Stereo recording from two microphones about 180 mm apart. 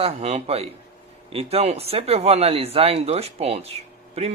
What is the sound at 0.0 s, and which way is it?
Speech, 35° right (ahead or behind).